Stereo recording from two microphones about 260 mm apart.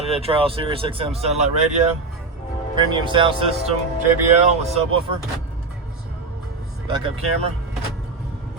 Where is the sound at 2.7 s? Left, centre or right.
Centre.